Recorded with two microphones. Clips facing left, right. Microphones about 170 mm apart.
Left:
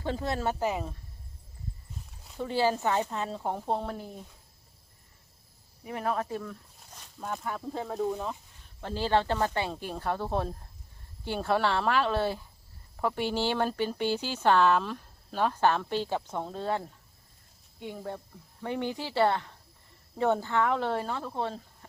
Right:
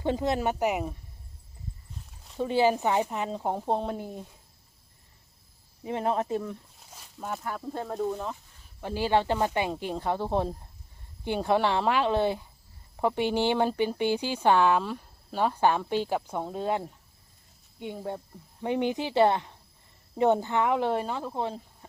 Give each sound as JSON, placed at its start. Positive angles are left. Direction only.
{"t": 0.0, "sound": "speech", "side_deg": -20}
{"t": 2.4, "sound": "speech", "side_deg": -15}
{"t": 5.8, "sound": "speech", "side_deg": -25}
{"t": 6.9, "sound": "speech", "side_deg": -5}
{"t": 8.8, "sound": "speech", "side_deg": -10}